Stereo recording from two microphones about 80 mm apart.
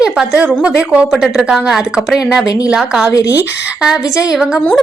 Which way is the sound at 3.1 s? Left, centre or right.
Left.